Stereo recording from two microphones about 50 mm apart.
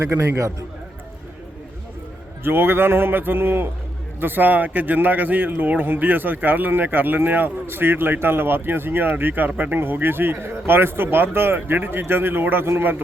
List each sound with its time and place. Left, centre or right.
0.0 s a man's voice: right
2.4 s a man's voice: right
7.7 s a man's voice: right